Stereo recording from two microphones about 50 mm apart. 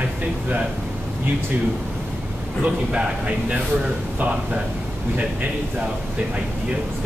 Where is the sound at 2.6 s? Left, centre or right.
Right.